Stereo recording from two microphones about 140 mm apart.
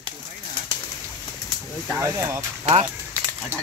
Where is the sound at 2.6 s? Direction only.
50° right (ahead or behind).